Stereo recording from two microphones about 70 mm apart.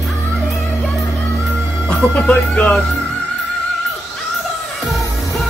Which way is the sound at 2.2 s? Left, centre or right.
Centre.